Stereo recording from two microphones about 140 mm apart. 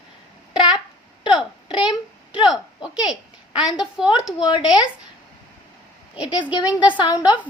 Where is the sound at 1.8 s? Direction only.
35° left (ahead or behind).